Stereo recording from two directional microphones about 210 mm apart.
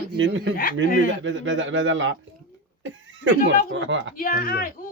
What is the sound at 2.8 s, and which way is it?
Cough, 65° right (ahead or behind).